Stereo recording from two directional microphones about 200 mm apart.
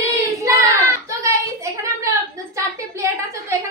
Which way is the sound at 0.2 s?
15° right (ahead or behind).